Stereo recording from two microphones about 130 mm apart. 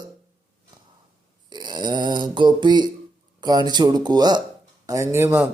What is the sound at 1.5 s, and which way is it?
Mantra, 35° right (ahead or behind).